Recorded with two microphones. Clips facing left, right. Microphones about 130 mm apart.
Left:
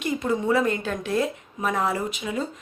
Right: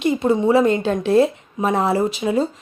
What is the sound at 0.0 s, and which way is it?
Speech, 25° right (ahead or behind).